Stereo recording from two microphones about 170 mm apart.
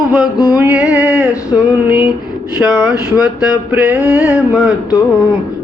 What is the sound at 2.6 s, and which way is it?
Speech, 5° right (ahead or behind).